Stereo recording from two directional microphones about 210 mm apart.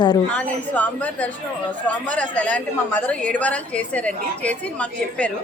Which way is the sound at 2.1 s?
5° left (ahead or behind).